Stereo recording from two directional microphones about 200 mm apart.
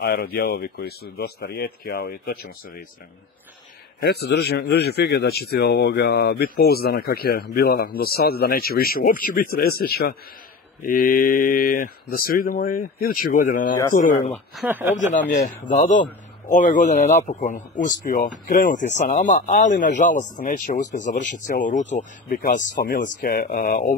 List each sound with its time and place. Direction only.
0.0 s a man's voice: 50° left (ahead or behind)
4.0 s a man's voice: 55° left (ahead or behind)
14.3 s speech: centre (ahead or behind)
15.1 s a man's voice: 50° left (ahead or behind)